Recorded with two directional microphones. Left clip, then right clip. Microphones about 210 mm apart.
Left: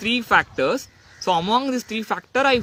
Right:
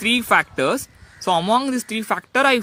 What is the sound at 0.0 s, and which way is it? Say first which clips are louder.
Speech: right 1 dB; 25° right (ahead or behind).